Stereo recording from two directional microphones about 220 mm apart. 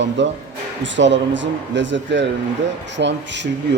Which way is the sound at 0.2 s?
55° right (ahead or behind).